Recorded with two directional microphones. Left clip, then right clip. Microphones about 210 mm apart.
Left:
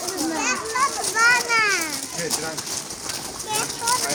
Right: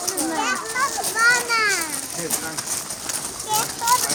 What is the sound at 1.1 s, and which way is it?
Children playing, 50° left (ahead or behind).